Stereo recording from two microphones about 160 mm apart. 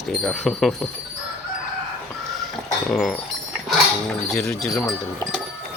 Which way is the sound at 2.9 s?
Centre (ahead or behind).